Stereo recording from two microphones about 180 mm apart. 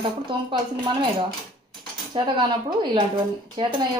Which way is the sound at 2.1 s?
25° right (ahead or behind).